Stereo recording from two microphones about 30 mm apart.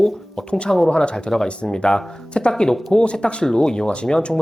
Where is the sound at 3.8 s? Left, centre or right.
Left.